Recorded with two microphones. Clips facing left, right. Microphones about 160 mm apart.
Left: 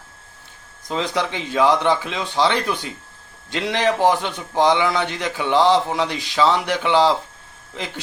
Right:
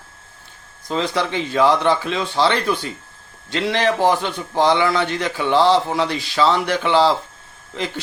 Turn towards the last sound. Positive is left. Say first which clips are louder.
# right 4 dB
turn(degrees=15)  # may be behind; listen again after turning